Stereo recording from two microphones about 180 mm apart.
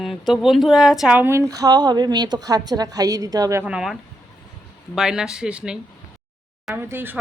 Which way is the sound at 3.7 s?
5° right (ahead or behind).